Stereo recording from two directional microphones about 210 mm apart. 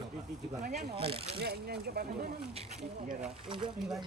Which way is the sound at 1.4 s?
50° right (ahead or behind).